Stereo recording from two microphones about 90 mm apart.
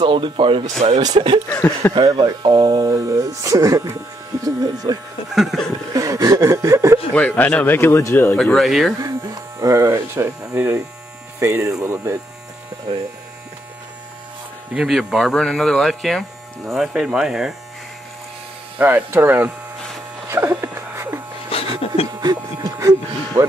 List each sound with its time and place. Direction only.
0.0 s speech: 65° right (ahead or behind); by 0.9 s 80° right
1.0 s speech: 55° right (ahead or behind)
5.3 s speech: 5° right (ahead or behind)
5.9 s chuckle: 40° right (ahead or behind)
7.2 s speech: 15° left (ahead or behind)
8.5 s speech: centre (ahead or behind)
9.0 s speech: 40° right (ahead or behind)
14.7 s speech: 5° right (ahead or behind)
18.8 s speech: 20° right (ahead or behind)
20.2 s a sound: 30° right (ahead or behind)
21.5 s a sound: 90° left
22.2 s music: 40° right (ahead or behind)